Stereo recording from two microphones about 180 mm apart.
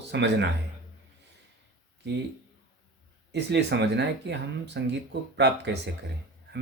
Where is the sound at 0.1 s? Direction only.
75° right (ahead or behind).